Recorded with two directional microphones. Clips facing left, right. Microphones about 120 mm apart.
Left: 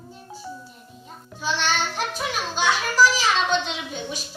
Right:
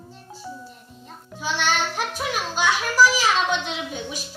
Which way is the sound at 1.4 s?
10° right (ahead or behind).